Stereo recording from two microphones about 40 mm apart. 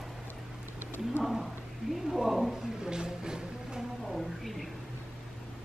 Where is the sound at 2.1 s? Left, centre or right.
Centre.